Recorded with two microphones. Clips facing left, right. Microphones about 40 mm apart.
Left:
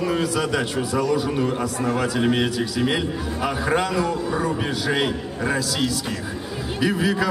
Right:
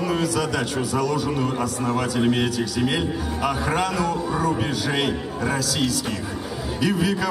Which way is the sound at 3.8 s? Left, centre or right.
Left.